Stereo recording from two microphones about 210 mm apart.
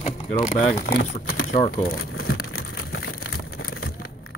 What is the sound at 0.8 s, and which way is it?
Speech, 50° left (ahead or behind).